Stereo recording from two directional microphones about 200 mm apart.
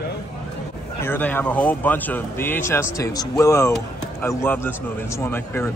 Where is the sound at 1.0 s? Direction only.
10° left (ahead or behind).